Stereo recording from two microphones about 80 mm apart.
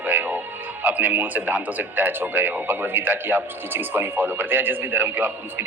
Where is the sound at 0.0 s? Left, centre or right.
Right.